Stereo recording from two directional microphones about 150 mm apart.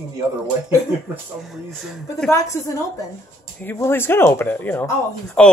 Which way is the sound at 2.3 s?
20° left (ahead or behind).